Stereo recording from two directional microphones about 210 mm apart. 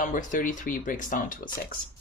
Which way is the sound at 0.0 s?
35° left (ahead or behind).